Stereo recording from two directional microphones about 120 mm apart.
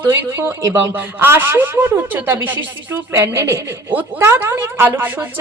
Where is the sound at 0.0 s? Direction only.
20° right (ahead or behind).